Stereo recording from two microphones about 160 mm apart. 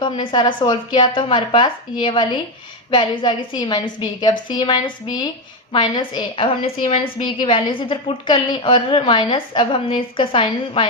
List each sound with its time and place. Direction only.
0.0 s a woman's voice: 30° left (ahead or behind)